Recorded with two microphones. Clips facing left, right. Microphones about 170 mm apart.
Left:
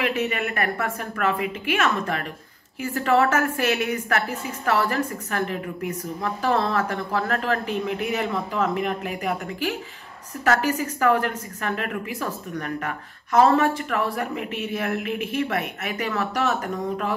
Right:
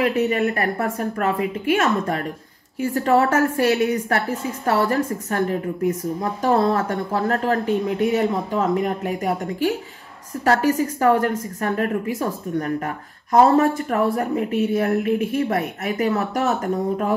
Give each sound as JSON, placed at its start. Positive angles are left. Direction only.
{"t": 0.0, "sound": "speech", "side_deg": -35}